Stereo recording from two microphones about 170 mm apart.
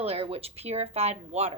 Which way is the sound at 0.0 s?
35° right (ahead or behind).